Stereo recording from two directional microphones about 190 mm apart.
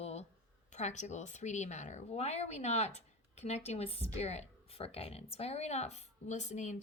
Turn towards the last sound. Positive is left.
turn(degrees=40)  # may be behind; listen again after turning